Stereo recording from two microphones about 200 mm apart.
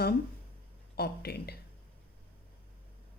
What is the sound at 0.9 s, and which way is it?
Speech, 50° left (ahead or behind).